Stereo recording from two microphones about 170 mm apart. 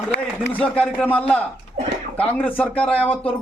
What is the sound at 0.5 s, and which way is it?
A man's voice, 5° left (ahead or behind).